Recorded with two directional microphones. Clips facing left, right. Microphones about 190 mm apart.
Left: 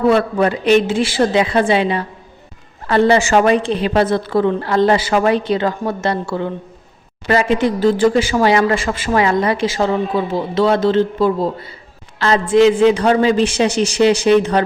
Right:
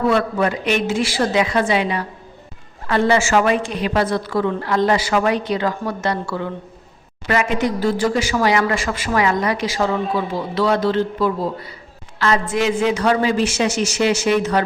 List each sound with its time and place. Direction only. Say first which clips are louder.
0.1 s a man's voice: left 4 dB; 30° left (ahead or behind)